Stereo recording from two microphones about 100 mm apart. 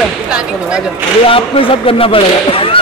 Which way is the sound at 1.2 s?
65° left (ahead or behind).